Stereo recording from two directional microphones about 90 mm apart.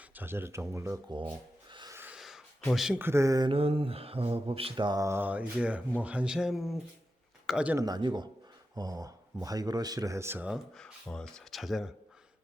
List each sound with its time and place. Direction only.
0.1 s speech: 25° right (ahead or behind)
1.0 s speech: 65° right (ahead or behind)
2.1 s a sound: 5° right (ahead or behind)
2.7 s speech: 5° right (ahead or behind)
3.0 s speech: 30° right (ahead or behind)
3.5 s mantra: 90° right; by 4.9 s 70° right (ahead or behind)
5.1 s mantra: 15° right (ahead or behind)
6.0 s speech: 15° right (ahead or behind)
7.9 s speech: 55° right (ahead or behind)
10.2 s speech: 25° right (ahead or behind)
11.1 s speech: 10° left (ahead or behind)